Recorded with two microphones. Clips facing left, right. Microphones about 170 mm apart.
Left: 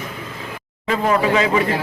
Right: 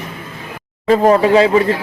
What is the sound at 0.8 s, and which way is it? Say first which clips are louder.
Speech: right 7 dB; 35° right (ahead or behind).